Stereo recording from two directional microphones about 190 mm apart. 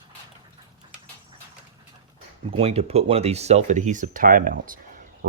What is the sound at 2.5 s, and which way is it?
Speech, 30° right (ahead or behind).